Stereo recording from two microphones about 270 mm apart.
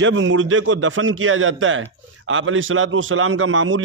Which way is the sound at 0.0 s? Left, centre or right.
Right.